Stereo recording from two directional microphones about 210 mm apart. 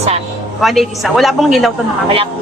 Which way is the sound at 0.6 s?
Centre (ahead or behind).